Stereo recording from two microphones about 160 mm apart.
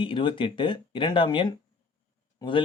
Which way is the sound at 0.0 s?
30° left (ahead or behind).